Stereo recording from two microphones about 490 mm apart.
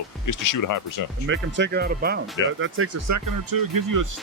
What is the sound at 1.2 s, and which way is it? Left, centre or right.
Speech, right.